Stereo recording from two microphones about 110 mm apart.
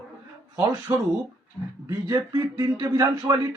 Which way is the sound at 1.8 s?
30° right (ahead or behind).